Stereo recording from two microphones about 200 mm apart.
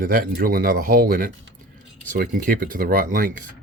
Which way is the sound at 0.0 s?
50° right (ahead or behind).